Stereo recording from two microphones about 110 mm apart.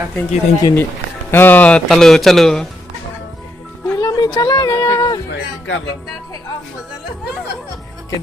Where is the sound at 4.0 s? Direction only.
40° left (ahead or behind).